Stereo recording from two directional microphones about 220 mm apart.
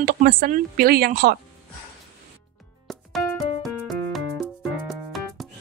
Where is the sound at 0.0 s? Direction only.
40° right (ahead or behind).